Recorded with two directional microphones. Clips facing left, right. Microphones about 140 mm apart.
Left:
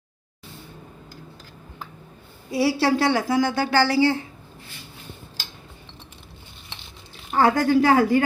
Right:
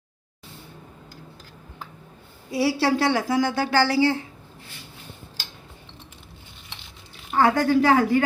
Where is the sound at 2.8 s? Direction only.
40° left (ahead or behind).